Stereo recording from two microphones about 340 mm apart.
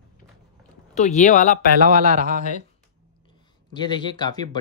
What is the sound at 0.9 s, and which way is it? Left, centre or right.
Speech, left.